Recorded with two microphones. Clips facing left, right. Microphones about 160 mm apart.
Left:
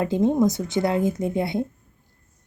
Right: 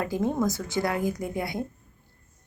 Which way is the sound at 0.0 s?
20° left (ahead or behind).